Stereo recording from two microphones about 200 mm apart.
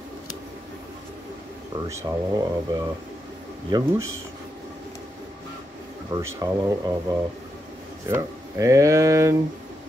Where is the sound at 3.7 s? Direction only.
20° right (ahead or behind).